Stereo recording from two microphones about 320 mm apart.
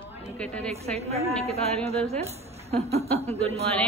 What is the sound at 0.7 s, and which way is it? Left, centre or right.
A woman's voice, centre.